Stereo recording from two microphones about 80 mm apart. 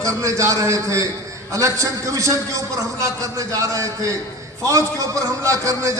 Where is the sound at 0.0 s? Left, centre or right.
Right.